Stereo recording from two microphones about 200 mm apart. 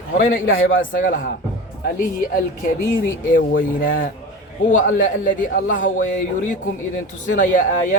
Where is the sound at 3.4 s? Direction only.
45° left (ahead or behind).